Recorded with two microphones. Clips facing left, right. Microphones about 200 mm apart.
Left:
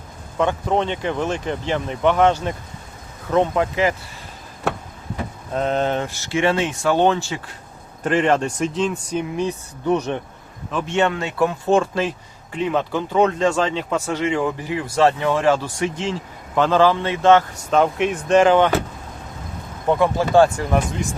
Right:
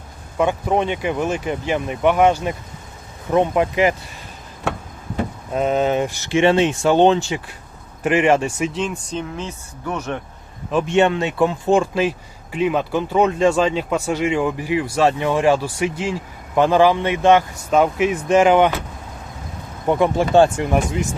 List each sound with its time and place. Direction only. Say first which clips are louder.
0.3 s speech: right 1 dB; 10° right (ahead or behind)
5.5 s speech: right 3 dB; 5° right (ahead or behind)
9.0 s speech: left 4 dB; 15° left (ahead or behind)
10.7 s speech: right 4 dB; 15° right (ahead or behind)
19.9 s speech: right 1 dB; 20° right (ahead or behind)